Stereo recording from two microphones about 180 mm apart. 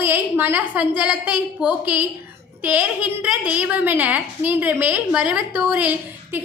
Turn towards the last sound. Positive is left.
turn(degrees=-10)  # may be behind; listen again after turning